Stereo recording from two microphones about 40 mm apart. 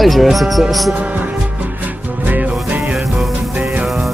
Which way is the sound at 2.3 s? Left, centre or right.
Right.